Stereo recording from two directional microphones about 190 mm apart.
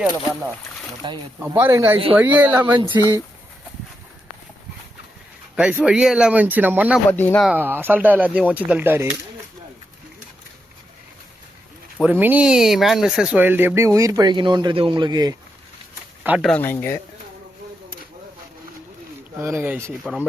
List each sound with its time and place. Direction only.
1.0 s speech: 25° right (ahead or behind)
1.4 s speech: 10° right (ahead or behind)
5.5 s speech: 5° right (ahead or behind)
7.1 s speech: 10° left (ahead or behind)
7.4 s speech: 10° right (ahead or behind)
12.0 s speech: 10° right (ahead or behind)
16.2 s speech: 10° right (ahead or behind)
16.5 s speech: 10° left (ahead or behind)
19.4 s speech: 15° right (ahead or behind)